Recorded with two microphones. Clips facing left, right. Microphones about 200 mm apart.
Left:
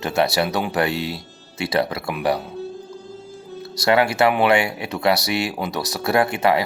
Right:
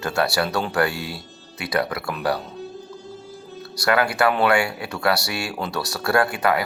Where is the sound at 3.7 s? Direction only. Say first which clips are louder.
Left 3 dB; 25° left (ahead or behind).